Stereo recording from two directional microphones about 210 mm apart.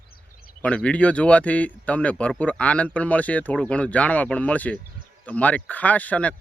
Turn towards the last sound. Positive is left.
turn(degrees=5)  # may be behind; listen again after turning